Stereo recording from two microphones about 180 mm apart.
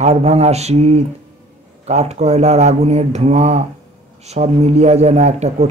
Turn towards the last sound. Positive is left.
turn(degrees=-40)  # may be behind; listen again after turning